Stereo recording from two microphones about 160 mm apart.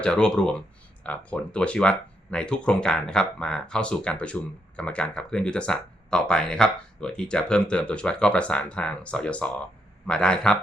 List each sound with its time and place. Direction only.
0.0 s speech: 5° left (ahead or behind)